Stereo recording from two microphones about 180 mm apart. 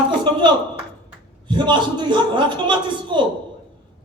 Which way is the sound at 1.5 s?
25° right (ahead or behind).